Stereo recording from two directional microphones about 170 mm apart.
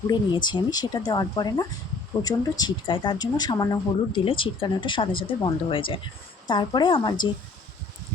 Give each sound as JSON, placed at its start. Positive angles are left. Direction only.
{"t": 0.1, "sound": "speech", "side_deg": 25}